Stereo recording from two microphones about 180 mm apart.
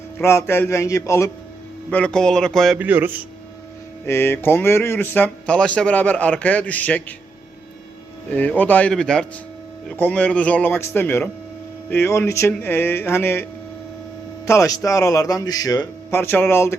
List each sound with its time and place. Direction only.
0.2 s speech: 15° left (ahead or behind)
1.9 s speech: 5° left (ahead or behind); by 3.2 s 10° right (ahead or behind)
4.0 s speech: 15° left (ahead or behind)
8.3 s speech: 10° left (ahead or behind)